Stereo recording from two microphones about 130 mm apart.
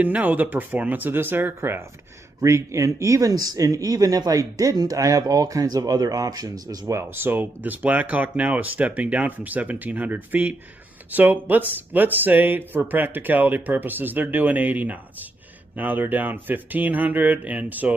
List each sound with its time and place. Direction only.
0.0 s speech: 10° right (ahead or behind)